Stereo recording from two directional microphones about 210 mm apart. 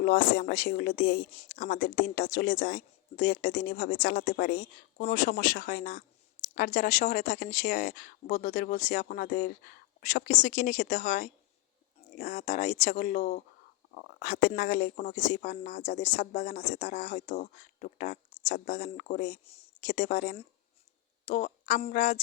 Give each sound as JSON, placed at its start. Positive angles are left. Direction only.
{"t": 0.0, "sound": "speech", "side_deg": 40}